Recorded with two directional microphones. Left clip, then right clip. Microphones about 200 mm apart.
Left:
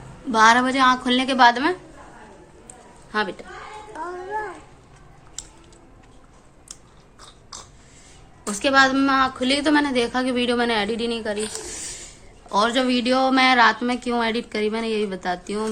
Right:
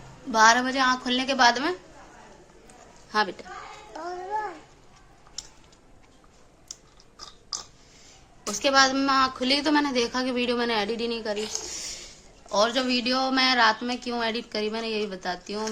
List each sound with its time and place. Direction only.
0.3 s a woman's voice: 10° right (ahead or behind)
3.1 s a child's voice: 20° right (ahead or behind)
8.4 s a woman's voice: 10° right (ahead or behind)